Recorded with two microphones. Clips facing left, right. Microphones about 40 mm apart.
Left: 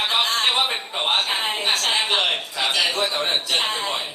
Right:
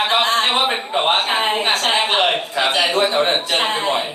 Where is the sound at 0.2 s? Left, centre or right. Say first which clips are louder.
Right 4 dB; right.